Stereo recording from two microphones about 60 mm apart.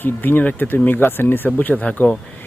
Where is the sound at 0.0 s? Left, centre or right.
Left.